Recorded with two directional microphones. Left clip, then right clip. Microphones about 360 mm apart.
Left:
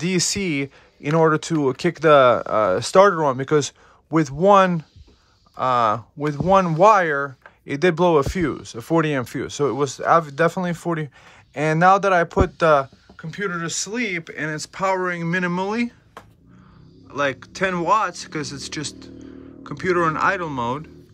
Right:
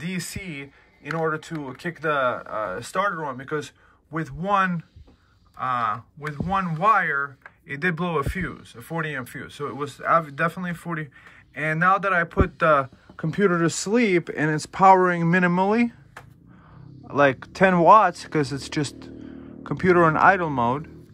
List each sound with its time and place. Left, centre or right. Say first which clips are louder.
0.0 s speech: left 11 dB; centre
13.1 s speech: right 7 dB; centre
17.1 s speech: right 4 dB; centre